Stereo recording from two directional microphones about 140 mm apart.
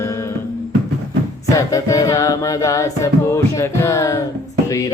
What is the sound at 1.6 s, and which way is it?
Music, 25° left (ahead or behind).